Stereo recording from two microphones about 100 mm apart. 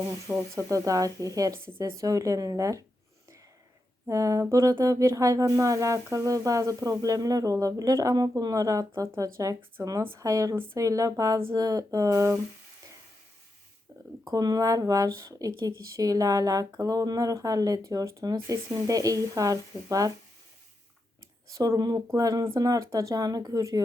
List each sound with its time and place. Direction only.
0.1 s speech: 30° right (ahead or behind)
4.0 s speech: 30° right (ahead or behind)
14.3 s speech: 40° right (ahead or behind)
21.5 s speech: 35° right (ahead or behind)